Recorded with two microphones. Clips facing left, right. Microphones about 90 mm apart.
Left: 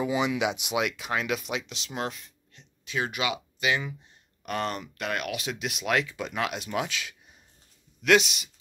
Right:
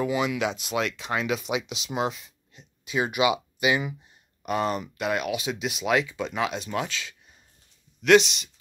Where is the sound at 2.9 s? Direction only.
15° right (ahead or behind); by 8.5 s 5° left (ahead or behind).